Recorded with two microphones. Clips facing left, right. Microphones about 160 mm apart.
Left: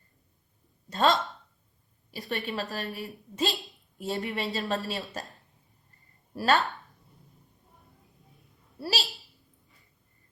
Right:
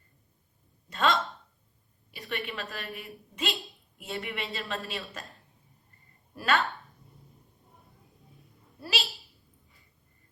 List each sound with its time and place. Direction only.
0.9 s speech: 40° left (ahead or behind)
2.0 s a sound: 40° left (ahead or behind)
2.5 s a woman's voice: 40° left (ahead or behind)
6.3 s speech: 35° left (ahead or behind)
8.8 s a woman's voice: 40° left (ahead or behind)